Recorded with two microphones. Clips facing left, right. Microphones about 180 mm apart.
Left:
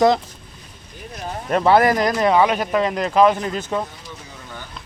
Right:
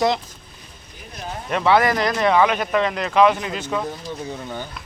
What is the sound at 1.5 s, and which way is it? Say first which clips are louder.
Speech: left 3 dB; 45° left (ahead or behind).